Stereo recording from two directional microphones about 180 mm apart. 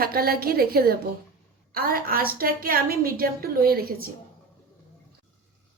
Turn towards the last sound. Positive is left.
turn(degrees=-55)  # may be behind; listen again after turning